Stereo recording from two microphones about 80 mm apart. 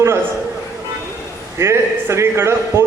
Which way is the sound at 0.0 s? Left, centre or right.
Right.